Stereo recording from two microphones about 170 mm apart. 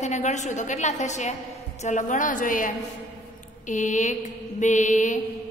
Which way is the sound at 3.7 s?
45° left (ahead or behind).